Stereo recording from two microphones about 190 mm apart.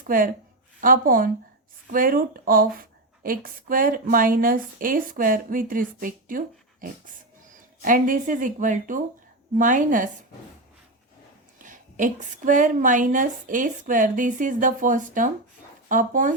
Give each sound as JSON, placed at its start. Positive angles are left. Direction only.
{"t": 0.8, "sound": "a woman's voice", "side_deg": -45}
{"t": 7.8, "sound": "a woman's voice", "side_deg": -45}
{"t": 11.6, "sound": "a woman's voice", "side_deg": -45}